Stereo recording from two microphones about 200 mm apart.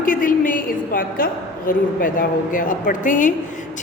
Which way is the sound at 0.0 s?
45° left (ahead or behind).